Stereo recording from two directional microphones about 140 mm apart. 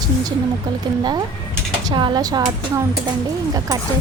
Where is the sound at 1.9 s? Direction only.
35° right (ahead or behind).